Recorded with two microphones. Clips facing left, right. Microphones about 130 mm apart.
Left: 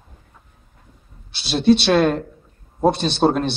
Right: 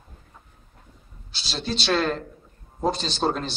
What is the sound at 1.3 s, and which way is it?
A man's voice, 60° left (ahead or behind).